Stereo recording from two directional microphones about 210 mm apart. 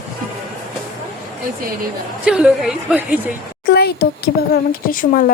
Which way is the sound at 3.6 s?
50° left (ahead or behind).